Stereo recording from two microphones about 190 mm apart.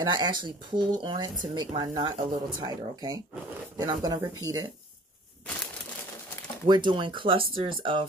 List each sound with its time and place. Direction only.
0.0 s speech: 20° right (ahead or behind)
6.7 s speech: 25° right (ahead or behind)